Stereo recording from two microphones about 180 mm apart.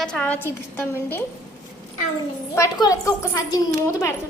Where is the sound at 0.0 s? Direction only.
5° left (ahead or behind).